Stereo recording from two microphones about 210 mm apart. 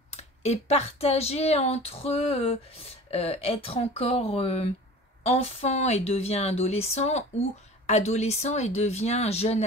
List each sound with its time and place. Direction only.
0.1 s speech: 30° left (ahead or behind)